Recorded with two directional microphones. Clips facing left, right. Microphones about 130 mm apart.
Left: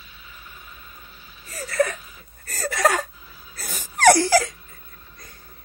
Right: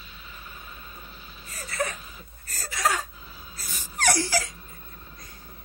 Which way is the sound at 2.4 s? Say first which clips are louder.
Left 6 dB; 60° left (ahead or behind).